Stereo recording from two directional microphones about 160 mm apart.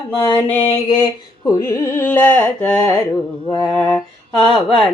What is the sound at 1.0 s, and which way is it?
Carnatic music, 20° left (ahead or behind).